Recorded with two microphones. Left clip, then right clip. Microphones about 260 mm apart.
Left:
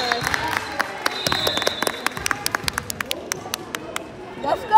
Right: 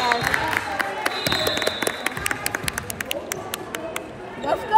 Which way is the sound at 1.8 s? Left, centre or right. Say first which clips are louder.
Left 1 dB; left.